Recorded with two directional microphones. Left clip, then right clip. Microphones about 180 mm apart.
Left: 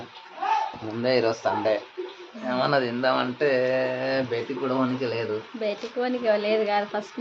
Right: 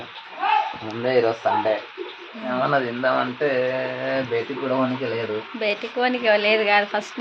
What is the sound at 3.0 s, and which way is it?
Speech, 30° left (ahead or behind).